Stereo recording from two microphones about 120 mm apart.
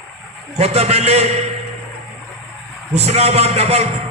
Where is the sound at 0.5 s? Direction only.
65° right (ahead or behind).